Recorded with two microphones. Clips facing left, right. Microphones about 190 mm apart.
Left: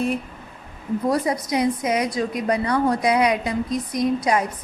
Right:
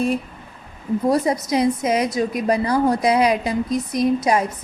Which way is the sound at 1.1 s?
25° right (ahead or behind).